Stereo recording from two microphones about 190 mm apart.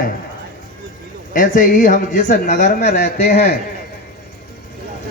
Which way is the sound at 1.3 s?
45° left (ahead or behind).